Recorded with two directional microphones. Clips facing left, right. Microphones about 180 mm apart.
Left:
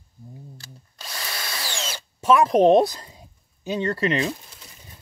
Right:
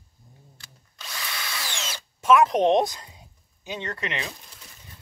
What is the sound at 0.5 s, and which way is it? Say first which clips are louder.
Drill: left 5 dB; 35° left (ahead or behind).